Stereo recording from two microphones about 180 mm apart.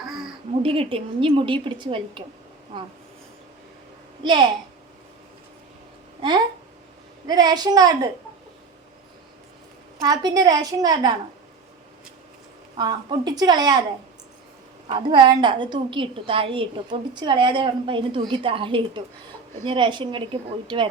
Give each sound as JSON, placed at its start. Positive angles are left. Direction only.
{"t": 0.6, "sound": "a woman's voice", "side_deg": -30}
{"t": 4.2, "sound": "a child's voice", "side_deg": -25}
{"t": 7.3, "sound": "a woman's voice", "side_deg": -20}
{"t": 10.0, "sound": "a woman's voice", "side_deg": -20}
{"t": 12.7, "sound": "a woman's voice", "side_deg": -25}
{"t": 14.8, "sound": "a woman's voice", "side_deg": -25}